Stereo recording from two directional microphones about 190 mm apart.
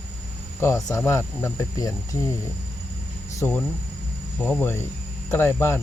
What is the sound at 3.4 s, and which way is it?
Speech, 10° left (ahead or behind).